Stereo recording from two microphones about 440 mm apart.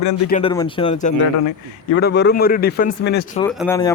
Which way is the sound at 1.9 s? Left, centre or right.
Left.